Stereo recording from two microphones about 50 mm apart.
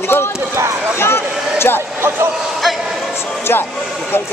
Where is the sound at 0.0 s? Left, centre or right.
Left.